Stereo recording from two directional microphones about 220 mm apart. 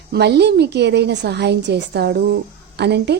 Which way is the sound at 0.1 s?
50° right (ahead or behind).